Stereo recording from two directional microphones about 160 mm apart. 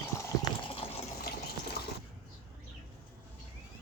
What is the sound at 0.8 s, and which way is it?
Fill, 35° left (ahead or behind).